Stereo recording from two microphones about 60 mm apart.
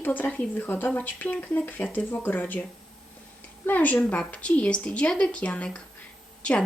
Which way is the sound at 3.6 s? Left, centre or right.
Left.